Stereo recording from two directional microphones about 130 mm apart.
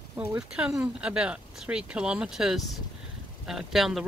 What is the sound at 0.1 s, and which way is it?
Speech, 15° right (ahead or behind).